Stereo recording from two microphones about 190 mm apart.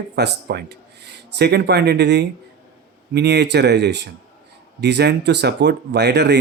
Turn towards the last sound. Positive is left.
turn(degrees=-60)  # may be behind; listen again after turning